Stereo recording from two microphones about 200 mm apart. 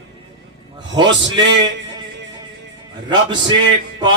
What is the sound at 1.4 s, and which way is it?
Music, 20° right (ahead or behind).